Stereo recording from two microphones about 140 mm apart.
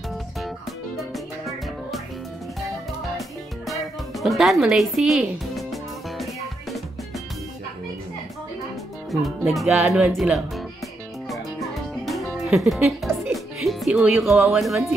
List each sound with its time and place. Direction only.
1.1 s music: centre (ahead or behind)
4.2 s speech: centre (ahead or behind)
9.1 s speech: centre (ahead or behind)
12.1 s music: centre (ahead or behind)
14.6 s speech: centre (ahead or behind)